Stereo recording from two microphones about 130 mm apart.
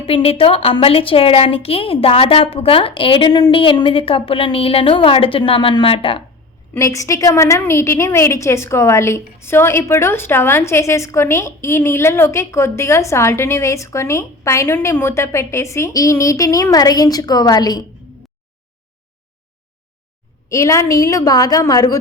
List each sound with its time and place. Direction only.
0.0 s a woman's voice: 45° left (ahead or behind)
6.7 s a woman's voice: 25° left (ahead or behind)
20.5 s a woman's voice: 25° left (ahead or behind)